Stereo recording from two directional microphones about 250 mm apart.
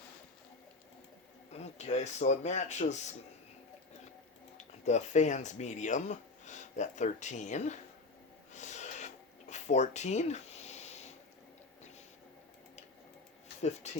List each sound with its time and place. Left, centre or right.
1.5 s speech: left
4.5 s speech: left
8.5 s a sound: left
13.6 s speech: left